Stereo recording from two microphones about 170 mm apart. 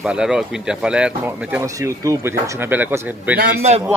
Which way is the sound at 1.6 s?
20° right (ahead or behind).